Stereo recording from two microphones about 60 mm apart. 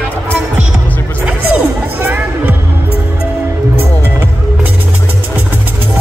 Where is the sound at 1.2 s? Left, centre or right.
Right.